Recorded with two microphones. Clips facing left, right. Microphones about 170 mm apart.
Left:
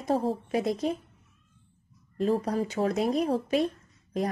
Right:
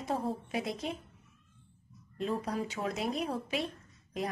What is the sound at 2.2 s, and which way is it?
A woman's voice, 40° left (ahead or behind).